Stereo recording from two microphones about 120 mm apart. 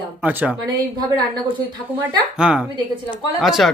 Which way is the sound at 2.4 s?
5° right (ahead or behind).